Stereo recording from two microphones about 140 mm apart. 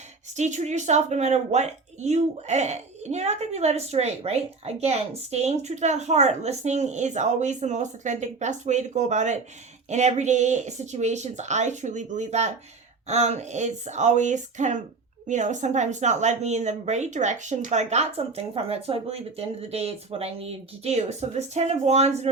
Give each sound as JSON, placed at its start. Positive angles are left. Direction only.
{"t": 0.3, "sound": "a woman's voice", "side_deg": -55}